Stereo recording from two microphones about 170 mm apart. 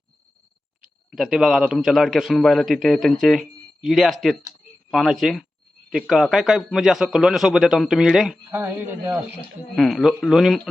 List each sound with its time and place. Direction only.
1.1 s a man's voice: centre (ahead or behind)
9.7 s a man's voice: centre (ahead or behind)